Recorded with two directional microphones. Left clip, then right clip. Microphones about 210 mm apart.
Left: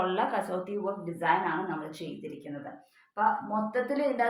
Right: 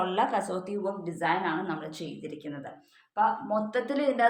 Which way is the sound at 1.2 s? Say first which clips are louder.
Left 1 dB; 30° right (ahead or behind).